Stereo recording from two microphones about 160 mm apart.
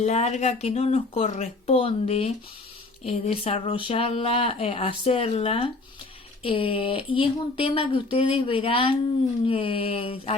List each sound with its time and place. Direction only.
0.0 s speech: 45° left (ahead or behind)